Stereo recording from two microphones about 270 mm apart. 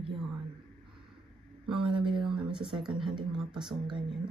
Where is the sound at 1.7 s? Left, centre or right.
Centre.